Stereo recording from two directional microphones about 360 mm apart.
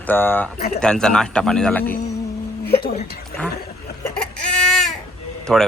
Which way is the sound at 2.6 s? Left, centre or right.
Left.